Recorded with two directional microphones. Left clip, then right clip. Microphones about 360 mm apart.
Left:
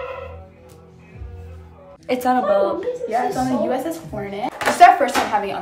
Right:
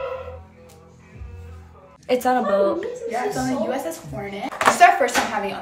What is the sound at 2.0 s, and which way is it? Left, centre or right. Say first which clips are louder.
Speech: left 1 dB; centre.